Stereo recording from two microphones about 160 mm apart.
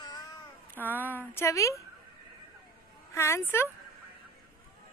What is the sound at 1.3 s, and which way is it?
Speech, 20° left (ahead or behind).